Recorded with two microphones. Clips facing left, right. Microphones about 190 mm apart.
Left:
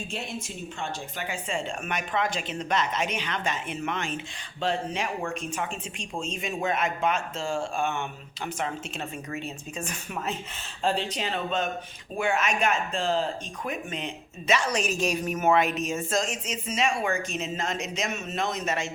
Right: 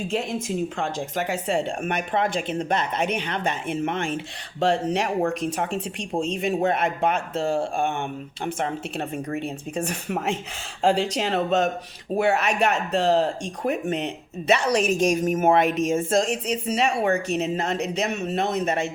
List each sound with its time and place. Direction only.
0.1 s a woman's voice: 90° right; by 4.1 s 50° right (ahead or behind)
4.6 s a woman's voice: 75° right (ahead or behind); by 9.4 s 50° right (ahead or behind)
9.7 s speech: 65° right (ahead or behind)
10.8 s speech: 85° right; by 14.7 s 60° right (ahead or behind)
14.8 s speech: 50° right (ahead or behind)